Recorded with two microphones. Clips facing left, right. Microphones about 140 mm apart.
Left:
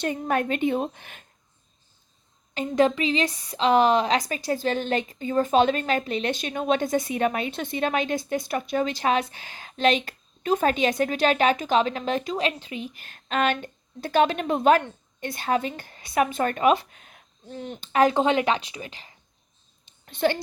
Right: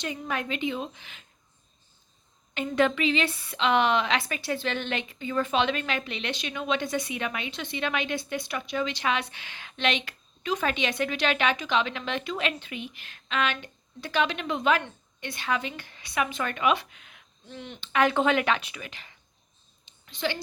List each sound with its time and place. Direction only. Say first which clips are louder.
0.0 s a woman's voice: left 7 dB; 50° left (ahead or behind)
2.6 s a woman's voice: left 3 dB; 35° left (ahead or behind)
20.1 s a child's voice: left 7 dB; 50° left (ahead or behind)